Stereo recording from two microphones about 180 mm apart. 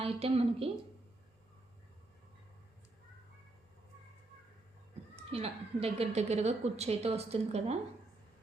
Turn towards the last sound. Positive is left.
turn(degrees=-35)  # may be behind; listen again after turning